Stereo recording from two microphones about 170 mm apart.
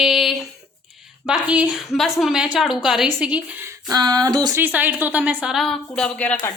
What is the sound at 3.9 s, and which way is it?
Speech, 20° right (ahead or behind).